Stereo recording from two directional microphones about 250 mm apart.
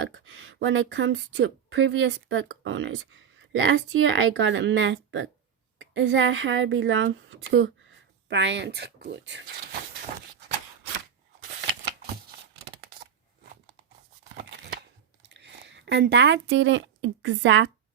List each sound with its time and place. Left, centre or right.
0.0 s speech: right
11.8 s a sound: right
15.3 s speech: right